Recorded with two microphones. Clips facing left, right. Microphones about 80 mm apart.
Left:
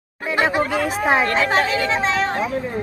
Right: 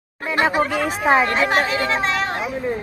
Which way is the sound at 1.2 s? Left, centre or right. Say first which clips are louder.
Even; right.